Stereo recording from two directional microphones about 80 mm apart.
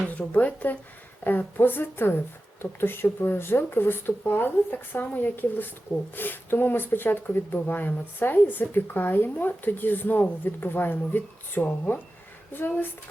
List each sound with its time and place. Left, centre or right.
0.0 s speech: centre